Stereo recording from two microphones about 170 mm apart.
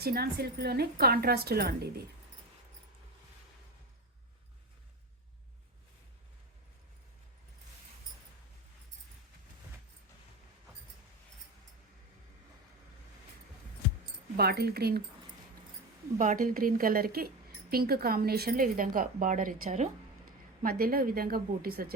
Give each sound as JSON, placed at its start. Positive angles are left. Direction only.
{"t": 0.0, "sound": "a woman's voice", "side_deg": -65}
{"t": 14.3, "sound": "a woman's voice", "side_deg": -70}
{"t": 16.1, "sound": "a woman's voice", "side_deg": -50}